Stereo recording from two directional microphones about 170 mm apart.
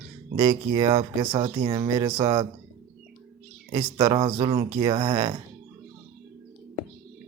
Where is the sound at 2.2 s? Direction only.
30° right (ahead or behind).